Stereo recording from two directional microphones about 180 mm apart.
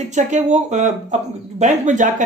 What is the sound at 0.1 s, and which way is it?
Speech, 40° right (ahead or behind).